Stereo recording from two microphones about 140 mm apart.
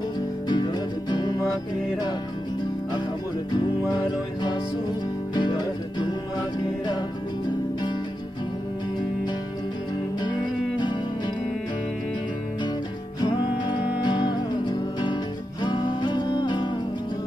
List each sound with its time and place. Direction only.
0.5 s music: 30° left (ahead or behind)
3.9 s music: 30° left (ahead or behind)
10.8 s music: 30° left (ahead or behind)
14.0 s music: 30° left (ahead or behind)